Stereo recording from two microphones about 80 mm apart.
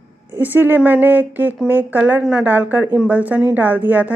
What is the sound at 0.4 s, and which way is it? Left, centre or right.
A woman's voice, right.